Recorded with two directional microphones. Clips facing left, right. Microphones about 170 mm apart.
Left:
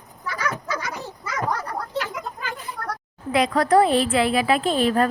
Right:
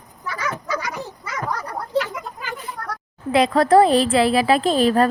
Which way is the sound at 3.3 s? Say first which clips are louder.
Right 3 dB; 30° right (ahead or behind).